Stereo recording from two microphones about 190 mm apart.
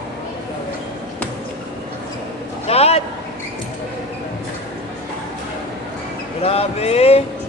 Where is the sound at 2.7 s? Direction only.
35° left (ahead or behind).